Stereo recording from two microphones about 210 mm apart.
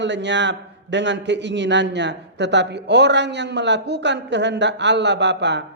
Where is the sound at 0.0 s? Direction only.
55° right (ahead or behind).